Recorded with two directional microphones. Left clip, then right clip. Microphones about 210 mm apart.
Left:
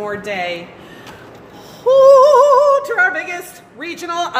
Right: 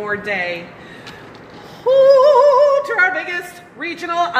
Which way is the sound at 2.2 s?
15° left (ahead or behind).